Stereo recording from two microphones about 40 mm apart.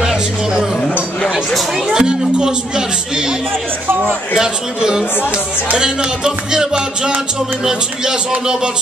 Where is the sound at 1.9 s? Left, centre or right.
Centre.